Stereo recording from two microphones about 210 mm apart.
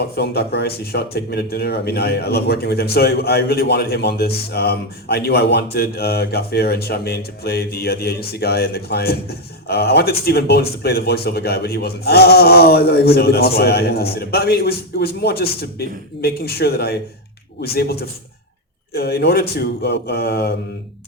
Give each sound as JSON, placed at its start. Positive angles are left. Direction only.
{"t": 0.2, "sound": "speech", "side_deg": 50}
{"t": 18.9, "sound": "speech", "side_deg": 50}